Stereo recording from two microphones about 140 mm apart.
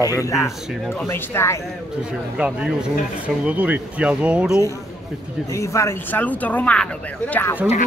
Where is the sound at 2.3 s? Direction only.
10° right (ahead or behind).